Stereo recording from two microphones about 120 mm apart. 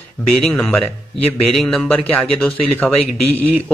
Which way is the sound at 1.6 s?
Centre (ahead or behind).